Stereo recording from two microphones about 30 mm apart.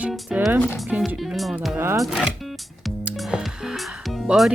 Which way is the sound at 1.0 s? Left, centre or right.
Centre.